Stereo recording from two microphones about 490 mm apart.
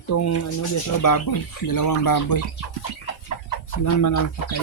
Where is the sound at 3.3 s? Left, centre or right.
Left.